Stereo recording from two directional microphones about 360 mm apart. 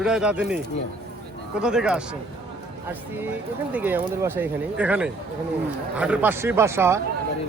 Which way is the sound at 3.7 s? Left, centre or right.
Centre.